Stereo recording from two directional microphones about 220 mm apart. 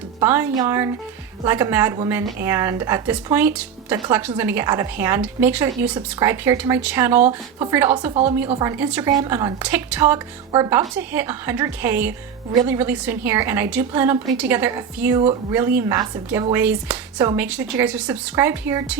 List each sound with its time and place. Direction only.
0.2 s a woman's voice: 10° right (ahead or behind)
8.4 s a woman's voice: 20° right (ahead or behind)